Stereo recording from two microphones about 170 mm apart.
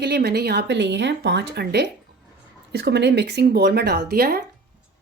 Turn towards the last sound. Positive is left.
turn(degrees=-65)  # may be behind; listen again after turning